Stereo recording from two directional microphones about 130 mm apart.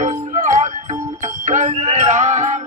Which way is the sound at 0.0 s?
75° right (ahead or behind).